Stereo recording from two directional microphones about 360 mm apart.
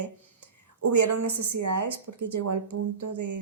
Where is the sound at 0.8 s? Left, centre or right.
Right.